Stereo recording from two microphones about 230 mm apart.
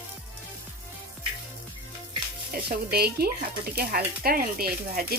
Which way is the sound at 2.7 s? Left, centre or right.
Right.